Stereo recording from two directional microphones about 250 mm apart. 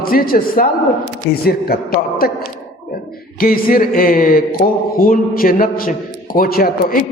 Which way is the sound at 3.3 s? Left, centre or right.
Left.